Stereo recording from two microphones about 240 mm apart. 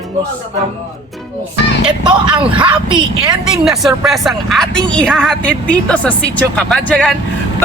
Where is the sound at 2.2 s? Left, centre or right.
Centre.